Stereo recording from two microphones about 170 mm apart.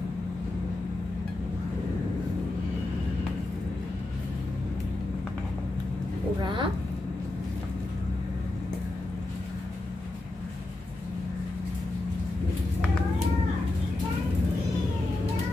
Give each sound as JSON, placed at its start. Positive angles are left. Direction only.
{"t": 6.4, "sound": "speech", "side_deg": -30}